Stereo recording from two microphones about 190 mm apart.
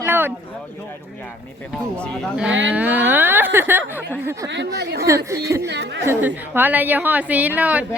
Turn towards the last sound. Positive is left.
turn(degrees=-5)  # may be behind; listen again after turning